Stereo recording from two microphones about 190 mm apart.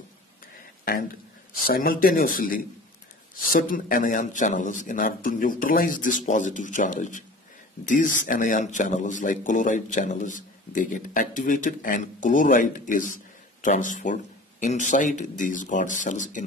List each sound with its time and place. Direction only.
1.7 s a man's voice: 50° left (ahead or behind)